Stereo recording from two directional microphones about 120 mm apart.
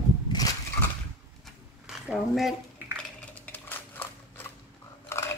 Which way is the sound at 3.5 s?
15° left (ahead or behind).